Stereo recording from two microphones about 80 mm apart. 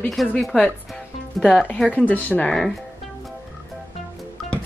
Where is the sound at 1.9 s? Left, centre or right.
Left.